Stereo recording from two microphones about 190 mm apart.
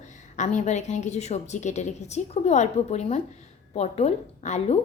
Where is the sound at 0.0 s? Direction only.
40° left (ahead or behind).